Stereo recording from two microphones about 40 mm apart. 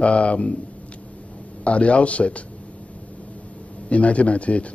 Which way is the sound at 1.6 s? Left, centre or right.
Left.